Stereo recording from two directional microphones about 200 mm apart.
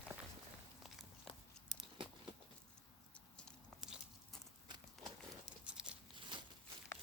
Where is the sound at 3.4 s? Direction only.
Centre (ahead or behind).